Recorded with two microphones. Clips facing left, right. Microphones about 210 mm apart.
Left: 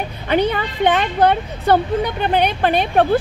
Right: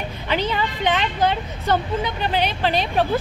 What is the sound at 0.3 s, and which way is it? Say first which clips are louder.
Speech: left 5 dB; 55° left (ahead or behind).